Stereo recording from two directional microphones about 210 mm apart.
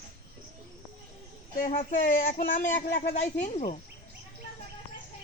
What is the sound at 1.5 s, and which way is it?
Speech, 40° left (ahead or behind).